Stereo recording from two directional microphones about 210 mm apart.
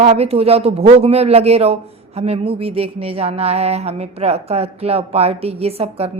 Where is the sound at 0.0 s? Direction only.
30° right (ahead or behind).